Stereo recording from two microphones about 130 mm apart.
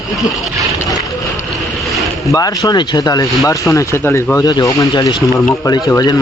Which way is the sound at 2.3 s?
30° left (ahead or behind).